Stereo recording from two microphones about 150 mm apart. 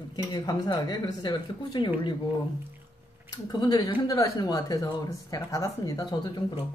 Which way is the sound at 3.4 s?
30° left (ahead or behind).